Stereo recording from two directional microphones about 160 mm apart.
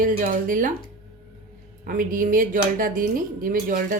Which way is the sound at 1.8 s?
60° right (ahead or behind).